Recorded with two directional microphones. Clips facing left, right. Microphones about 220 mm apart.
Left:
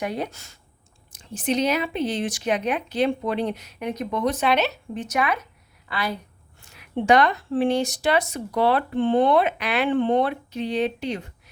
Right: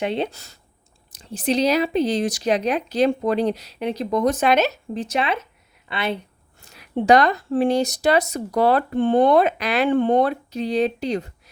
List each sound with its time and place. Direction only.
0.0 s speech: 25° right (ahead or behind); by 5.0 s 45° right (ahead or behind)
5.0 s speech: 30° right (ahead or behind)
6.6 s speech: 35° right (ahead or behind)